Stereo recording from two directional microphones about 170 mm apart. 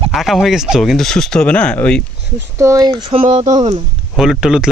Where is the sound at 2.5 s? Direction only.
20° right (ahead or behind).